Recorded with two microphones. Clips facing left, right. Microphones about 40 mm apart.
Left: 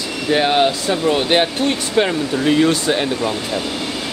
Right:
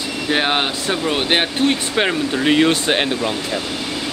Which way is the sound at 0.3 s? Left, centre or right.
Right.